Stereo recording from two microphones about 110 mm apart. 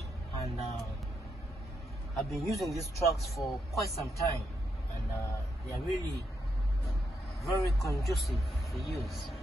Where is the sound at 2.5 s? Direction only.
Centre (ahead or behind).